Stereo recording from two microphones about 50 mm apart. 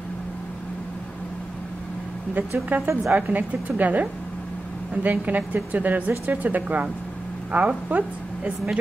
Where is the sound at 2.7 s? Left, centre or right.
Right.